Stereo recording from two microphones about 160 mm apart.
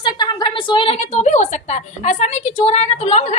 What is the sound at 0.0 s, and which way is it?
A woman's voice, 30° left (ahead or behind).